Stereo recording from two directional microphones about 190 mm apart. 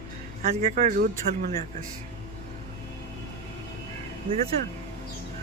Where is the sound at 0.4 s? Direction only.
50° right (ahead or behind).